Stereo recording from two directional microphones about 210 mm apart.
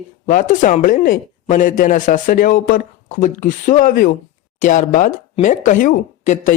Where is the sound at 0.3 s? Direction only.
40° left (ahead or behind).